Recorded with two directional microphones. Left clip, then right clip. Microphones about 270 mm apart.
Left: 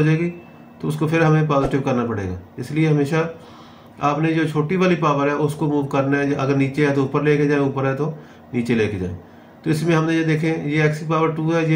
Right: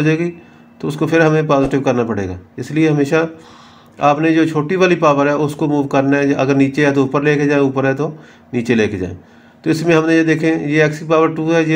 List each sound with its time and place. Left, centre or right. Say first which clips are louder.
0.0 s a man's voice: right 4 dB; right